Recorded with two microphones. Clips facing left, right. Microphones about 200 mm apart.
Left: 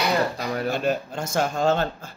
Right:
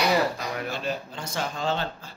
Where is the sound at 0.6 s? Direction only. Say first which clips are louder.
Left 9 dB; 50° left (ahead or behind).